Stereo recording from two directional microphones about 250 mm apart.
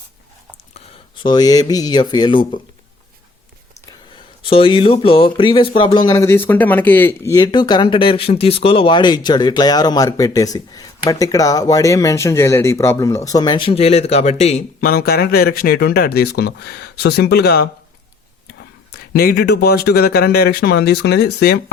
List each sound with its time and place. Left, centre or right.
0.7 s speech: centre
4.4 s speech: left